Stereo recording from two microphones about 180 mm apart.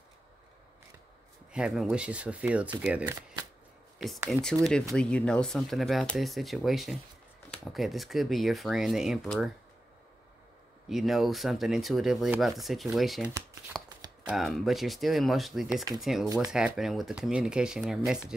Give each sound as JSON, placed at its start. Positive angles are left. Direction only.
{"t": 1.5, "sound": "speech", "side_deg": -5}
{"t": 4.3, "sound": "speech", "side_deg": 5}
{"t": 10.9, "sound": "speech", "side_deg": 0}
{"t": 13.7, "sound": "shuffling cards", "side_deg": 0}
{"t": 14.2, "sound": "speech", "side_deg": 0}
{"t": 15.7, "sound": "speech", "side_deg": -20}
{"t": 16.0, "sound": "speech", "side_deg": 0}